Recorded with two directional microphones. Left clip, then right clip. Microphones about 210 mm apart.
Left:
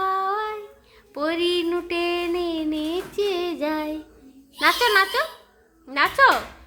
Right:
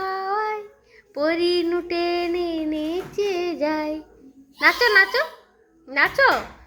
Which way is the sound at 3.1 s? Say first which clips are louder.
Right 1 dB; 10° left (ahead or behind).